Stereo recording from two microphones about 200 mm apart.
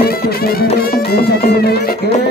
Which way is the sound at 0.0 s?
50° left (ahead or behind).